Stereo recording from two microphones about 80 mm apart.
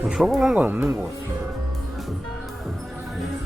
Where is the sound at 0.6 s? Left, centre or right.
Right.